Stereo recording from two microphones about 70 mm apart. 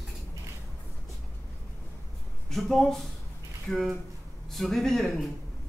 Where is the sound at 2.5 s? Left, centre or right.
Centre.